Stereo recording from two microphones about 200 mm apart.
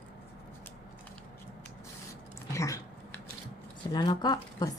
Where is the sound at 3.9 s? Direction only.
20° left (ahead or behind).